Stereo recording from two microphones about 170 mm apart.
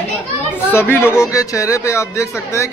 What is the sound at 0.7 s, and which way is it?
Speech, 10° left (ahead or behind).